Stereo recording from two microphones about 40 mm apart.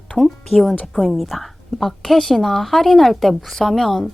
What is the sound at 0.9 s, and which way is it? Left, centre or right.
A woman's voice, centre.